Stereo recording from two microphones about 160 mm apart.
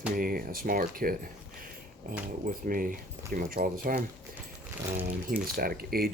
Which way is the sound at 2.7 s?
60° right (ahead or behind).